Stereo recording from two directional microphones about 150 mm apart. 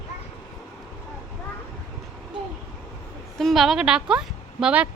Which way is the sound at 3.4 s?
Centre (ahead or behind).